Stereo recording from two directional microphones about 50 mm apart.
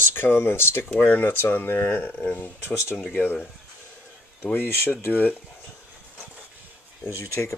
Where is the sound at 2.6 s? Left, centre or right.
Left.